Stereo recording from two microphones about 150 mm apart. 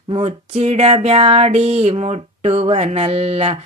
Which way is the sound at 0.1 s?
35° right (ahead or behind).